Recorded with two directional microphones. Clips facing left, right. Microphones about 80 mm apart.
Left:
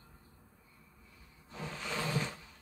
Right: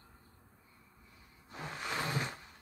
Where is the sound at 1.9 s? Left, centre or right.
Right.